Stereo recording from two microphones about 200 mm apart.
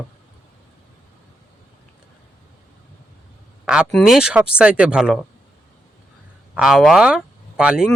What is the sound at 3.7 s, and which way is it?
Speech, centre (ahead or behind).